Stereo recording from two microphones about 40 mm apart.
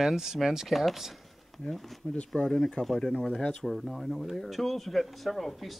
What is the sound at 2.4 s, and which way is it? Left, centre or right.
Speech, centre.